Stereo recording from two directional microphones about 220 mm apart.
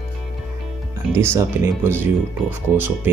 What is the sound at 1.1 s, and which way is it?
Speech, 10° right (ahead or behind).